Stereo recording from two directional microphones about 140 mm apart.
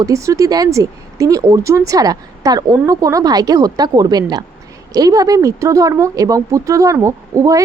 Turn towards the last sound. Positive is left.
turn(degrees=-20)  # may be behind; listen again after turning